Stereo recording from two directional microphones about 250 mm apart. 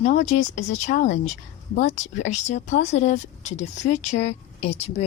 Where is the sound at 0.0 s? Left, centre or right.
Left.